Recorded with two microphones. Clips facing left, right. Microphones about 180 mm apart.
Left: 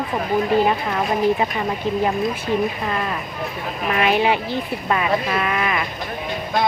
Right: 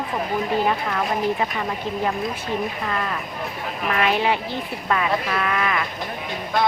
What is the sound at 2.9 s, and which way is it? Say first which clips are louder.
A woman's voice: left 2 dB; 20° left (ahead or behind).